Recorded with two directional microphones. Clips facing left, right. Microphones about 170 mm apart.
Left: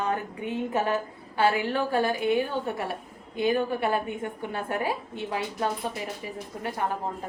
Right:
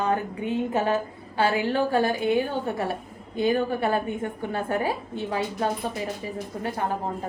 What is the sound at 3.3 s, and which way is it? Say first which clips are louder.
A woman's voice: right 2 dB; 35° right (ahead or behind).